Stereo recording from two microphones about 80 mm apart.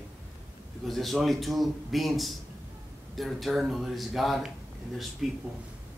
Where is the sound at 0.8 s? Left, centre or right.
Centre.